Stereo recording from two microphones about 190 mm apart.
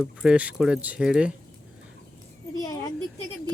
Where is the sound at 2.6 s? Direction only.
20° left (ahead or behind).